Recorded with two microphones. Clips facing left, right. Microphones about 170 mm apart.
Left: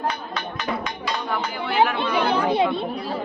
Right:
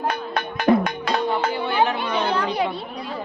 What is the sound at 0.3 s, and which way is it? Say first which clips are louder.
Music: right 9 dB; 55° right (ahead or behind).